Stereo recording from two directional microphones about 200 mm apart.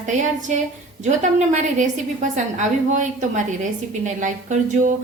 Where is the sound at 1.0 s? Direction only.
35° right (ahead or behind).